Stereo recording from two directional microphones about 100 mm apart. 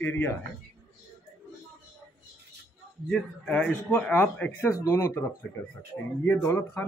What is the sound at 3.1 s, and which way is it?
Speech, 10° left (ahead or behind).